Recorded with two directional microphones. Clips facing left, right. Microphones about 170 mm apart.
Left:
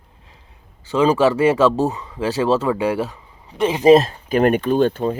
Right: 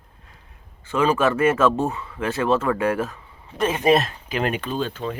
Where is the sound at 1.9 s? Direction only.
20° left (ahead or behind).